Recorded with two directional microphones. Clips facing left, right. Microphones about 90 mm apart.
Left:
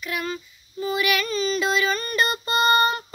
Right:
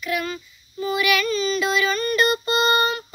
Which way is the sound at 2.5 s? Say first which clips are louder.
Left 4 dB; 30° left (ahead or behind).